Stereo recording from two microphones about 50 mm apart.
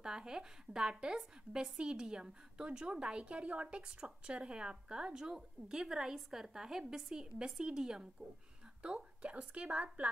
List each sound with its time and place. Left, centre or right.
0.0 s a woman's voice: centre